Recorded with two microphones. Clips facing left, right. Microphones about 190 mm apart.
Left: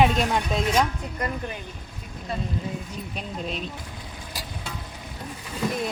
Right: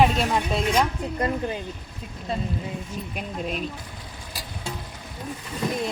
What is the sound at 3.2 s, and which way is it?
Speech, 5° right (ahead or behind).